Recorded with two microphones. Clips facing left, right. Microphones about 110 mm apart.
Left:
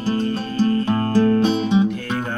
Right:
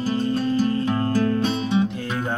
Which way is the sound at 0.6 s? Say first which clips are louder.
Left 3 dB; 30° left (ahead or behind).